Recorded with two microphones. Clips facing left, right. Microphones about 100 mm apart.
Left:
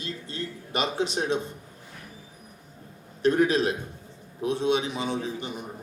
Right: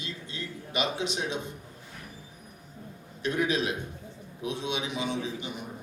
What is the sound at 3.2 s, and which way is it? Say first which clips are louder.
A man's voice: left 6 dB; 40° left (ahead or behind).